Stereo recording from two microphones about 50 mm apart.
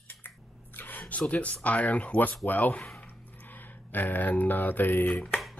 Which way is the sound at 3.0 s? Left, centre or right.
Left.